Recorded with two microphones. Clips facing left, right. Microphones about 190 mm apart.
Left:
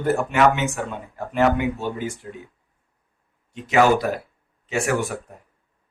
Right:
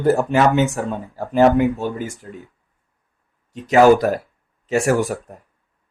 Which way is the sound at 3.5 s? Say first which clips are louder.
Right 5 dB; 40° right (ahead or behind).